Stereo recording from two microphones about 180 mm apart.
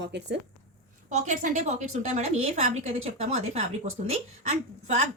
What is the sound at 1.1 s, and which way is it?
A woman's voice, 40° right (ahead or behind).